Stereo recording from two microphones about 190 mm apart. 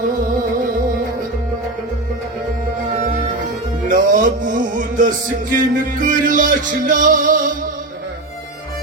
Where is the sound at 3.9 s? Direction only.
45° right (ahead or behind).